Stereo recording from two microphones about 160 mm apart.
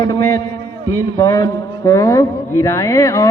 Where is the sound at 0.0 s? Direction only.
20° left (ahead or behind).